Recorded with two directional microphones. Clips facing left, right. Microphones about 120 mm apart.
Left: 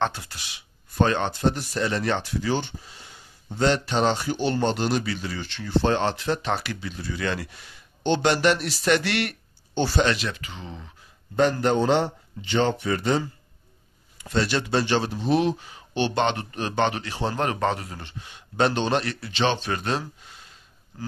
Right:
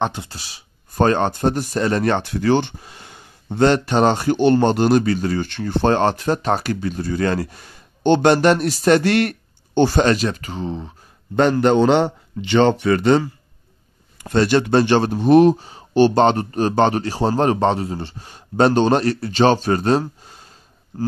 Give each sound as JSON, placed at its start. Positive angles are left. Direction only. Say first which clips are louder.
{"t": 0.0, "sound": "speech", "louder": "right 3 dB", "side_deg": -20}
{"t": 0.3, "sound": "speech", "louder": "right 3 dB", "side_deg": -35}
{"t": 11.3, "sound": "speech", "louder": "right 6 dB", "side_deg": -65}
{"t": 14.2, "sound": "speech", "louder": "right 8 dB", "side_deg": -55}
{"t": 15.5, "sound": "speech", "louder": "right 11 dB", "side_deg": -35}